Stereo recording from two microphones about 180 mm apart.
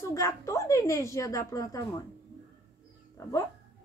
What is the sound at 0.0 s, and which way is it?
A woman's voice, 15° left (ahead or behind).